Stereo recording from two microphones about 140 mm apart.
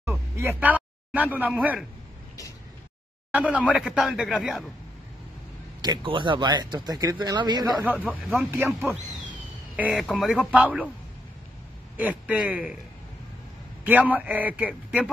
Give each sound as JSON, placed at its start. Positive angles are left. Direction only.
{"t": 0.0, "sound": "a sound", "side_deg": -15}
{"t": 3.3, "sound": "a man's voice", "side_deg": -10}
{"t": 5.8, "sound": "speech", "side_deg": -35}
{"t": 7.8, "sound": "a man's voice", "side_deg": -10}
{"t": 9.8, "sound": "speech", "side_deg": 0}
{"t": 12.0, "sound": "a man's voice", "side_deg": -10}
{"t": 13.8, "sound": "a man's voice", "side_deg": -10}